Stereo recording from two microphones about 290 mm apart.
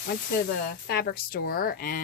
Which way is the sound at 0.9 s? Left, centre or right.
Left.